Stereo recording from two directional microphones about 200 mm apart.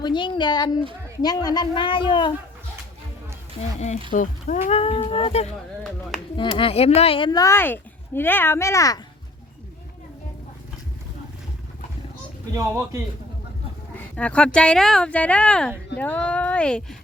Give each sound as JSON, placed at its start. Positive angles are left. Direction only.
{"t": 0.0, "sound": "speech", "side_deg": 25}
{"t": 3.6, "sound": "speech", "side_deg": 35}
{"t": 12.5, "sound": "a man's voice", "side_deg": -15}
{"t": 14.2, "sound": "speech", "side_deg": 5}